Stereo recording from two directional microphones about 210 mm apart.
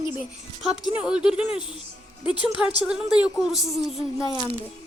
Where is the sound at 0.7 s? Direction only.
5° right (ahead or behind).